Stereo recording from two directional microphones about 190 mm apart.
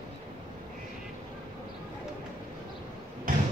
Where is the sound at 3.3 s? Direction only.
45° right (ahead or behind).